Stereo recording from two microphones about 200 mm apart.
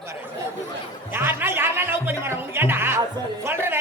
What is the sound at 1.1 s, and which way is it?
Speech, 10° right (ahead or behind).